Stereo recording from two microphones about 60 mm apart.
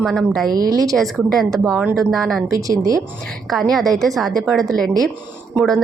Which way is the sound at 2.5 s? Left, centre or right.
Right.